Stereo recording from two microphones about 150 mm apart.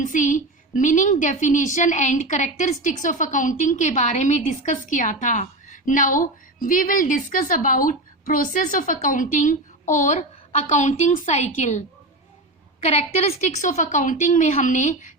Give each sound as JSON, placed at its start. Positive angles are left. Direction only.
{"t": 0.0, "sound": "a woman's voice", "side_deg": 60}
{"t": 12.8, "sound": "a woman's voice", "side_deg": 45}